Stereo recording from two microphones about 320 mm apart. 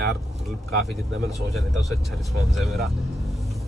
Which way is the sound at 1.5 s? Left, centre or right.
Centre.